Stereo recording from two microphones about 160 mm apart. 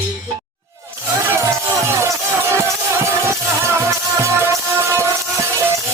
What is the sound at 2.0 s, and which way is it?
Music, 15° right (ahead or behind).